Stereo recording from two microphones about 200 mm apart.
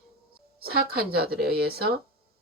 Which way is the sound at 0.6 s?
50° right (ahead or behind).